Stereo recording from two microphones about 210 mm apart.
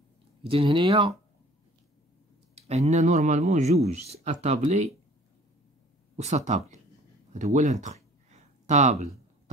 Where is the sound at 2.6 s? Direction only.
30° right (ahead or behind).